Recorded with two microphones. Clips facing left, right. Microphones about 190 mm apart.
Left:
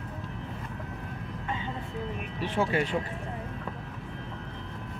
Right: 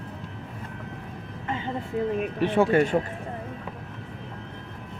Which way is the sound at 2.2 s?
60° right (ahead or behind).